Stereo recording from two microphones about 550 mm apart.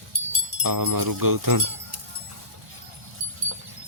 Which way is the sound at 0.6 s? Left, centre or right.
Right.